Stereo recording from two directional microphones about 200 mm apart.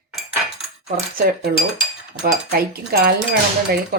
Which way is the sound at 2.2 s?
50° right (ahead or behind).